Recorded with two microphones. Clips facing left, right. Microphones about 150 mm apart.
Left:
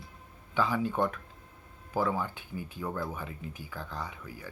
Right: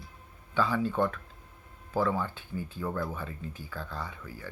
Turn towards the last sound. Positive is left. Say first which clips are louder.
# even
turn(degrees=20)  # may be behind; listen again after turning